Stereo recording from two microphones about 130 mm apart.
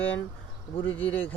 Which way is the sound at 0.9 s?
15° left (ahead or behind).